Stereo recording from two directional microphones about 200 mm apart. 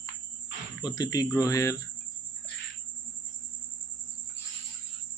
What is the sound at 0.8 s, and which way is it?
Speech, 20° left (ahead or behind).